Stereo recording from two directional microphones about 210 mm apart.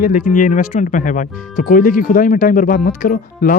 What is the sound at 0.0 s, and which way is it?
Speech, 40° left (ahead or behind).